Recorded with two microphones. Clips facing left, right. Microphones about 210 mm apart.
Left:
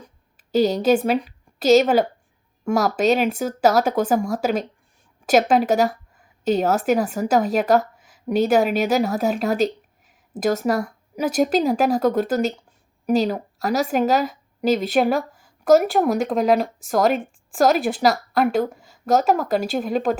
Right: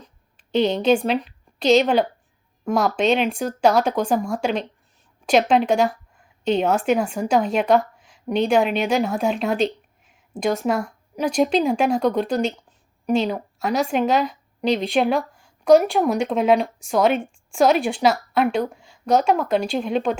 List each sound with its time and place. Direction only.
0.5 s a woman's voice: 40° left (ahead or behind)
0.8 s a woman's voice: 5° left (ahead or behind)